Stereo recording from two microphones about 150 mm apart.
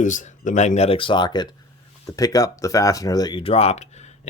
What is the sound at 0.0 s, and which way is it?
Speech, 55° left (ahead or behind).